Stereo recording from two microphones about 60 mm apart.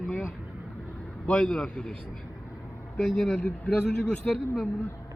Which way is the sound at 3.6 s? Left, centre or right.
Centre.